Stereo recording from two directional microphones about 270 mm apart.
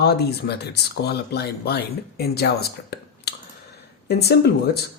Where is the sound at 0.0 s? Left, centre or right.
Left.